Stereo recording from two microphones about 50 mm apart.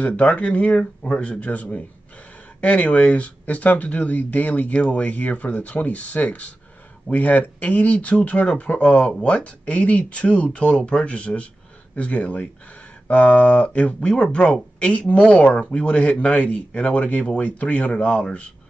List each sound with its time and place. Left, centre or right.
0.0 s speech: left
0.7 s speech: centre
1.4 s speech: left